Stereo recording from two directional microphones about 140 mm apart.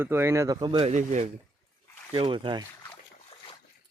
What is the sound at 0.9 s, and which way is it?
Speech, 60° right (ahead or behind).